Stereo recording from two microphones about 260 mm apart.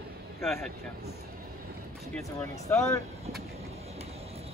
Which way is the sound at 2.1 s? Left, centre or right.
Centre.